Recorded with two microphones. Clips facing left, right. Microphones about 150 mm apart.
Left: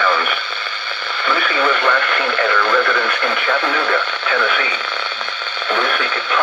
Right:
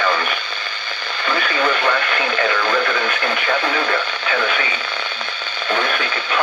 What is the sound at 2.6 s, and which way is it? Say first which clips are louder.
Speech: left 2 dB; 35° right (ahead or behind).